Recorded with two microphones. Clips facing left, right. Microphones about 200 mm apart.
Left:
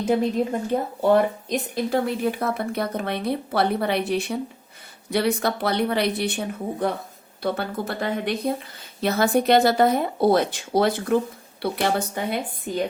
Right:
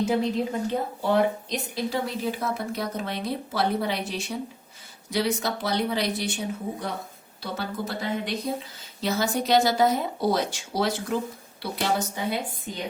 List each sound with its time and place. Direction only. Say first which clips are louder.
0.0 s a woman's voice: left 3 dB; 50° left (ahead or behind)